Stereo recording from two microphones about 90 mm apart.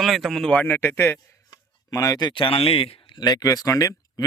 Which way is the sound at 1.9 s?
40° left (ahead or behind).